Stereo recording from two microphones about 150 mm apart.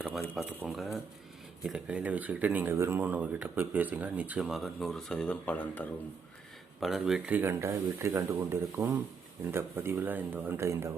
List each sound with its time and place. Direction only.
0.0 s speech: 5° right (ahead or behind); by 10.9 s 20° right (ahead or behind)